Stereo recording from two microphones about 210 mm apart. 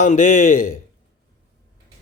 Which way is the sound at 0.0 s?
35° left (ahead or behind).